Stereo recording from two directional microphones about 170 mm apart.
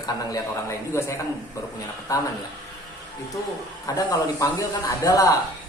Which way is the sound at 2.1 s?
20° left (ahead or behind).